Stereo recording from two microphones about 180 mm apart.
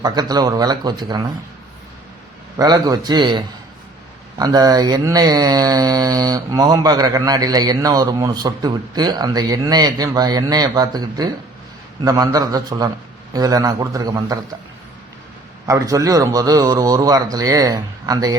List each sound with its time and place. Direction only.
0.0 s speech: 20° right (ahead or behind)
2.6 s speech: 20° right (ahead or behind)
15.6 s speech: 20° right (ahead or behind)